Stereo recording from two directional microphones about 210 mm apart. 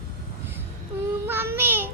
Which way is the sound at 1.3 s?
10° right (ahead or behind).